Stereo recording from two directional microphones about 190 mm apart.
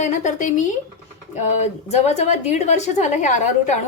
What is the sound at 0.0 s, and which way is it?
A woman's voice, 40° left (ahead or behind).